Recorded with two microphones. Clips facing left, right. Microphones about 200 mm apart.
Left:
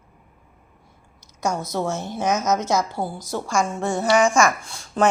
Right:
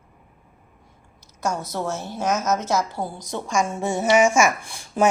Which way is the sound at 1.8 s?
10° right (ahead or behind).